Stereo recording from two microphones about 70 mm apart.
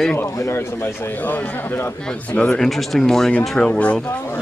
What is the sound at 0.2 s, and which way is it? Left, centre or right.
Speech, left.